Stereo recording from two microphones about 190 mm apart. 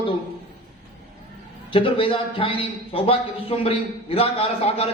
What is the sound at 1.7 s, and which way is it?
A man's voice, 30° left (ahead or behind).